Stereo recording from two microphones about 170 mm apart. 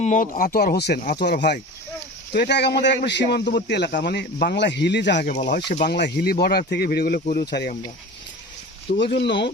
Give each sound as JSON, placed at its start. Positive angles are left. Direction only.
{"t": 0.0, "sound": "speech", "side_deg": 50}
{"t": 1.2, "sound": "a man's voice", "side_deg": 90}
{"t": 7.3, "sound": "a man's voice", "side_deg": 80}
{"t": 9.0, "sound": "a man's voice", "side_deg": 90}